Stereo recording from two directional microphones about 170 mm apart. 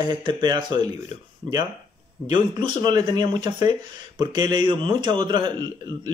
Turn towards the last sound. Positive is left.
turn(degrees=-25)  # may be behind; listen again after turning